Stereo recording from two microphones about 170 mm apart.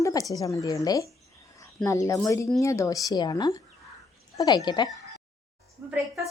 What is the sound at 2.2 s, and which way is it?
Speech, 20° left (ahead or behind).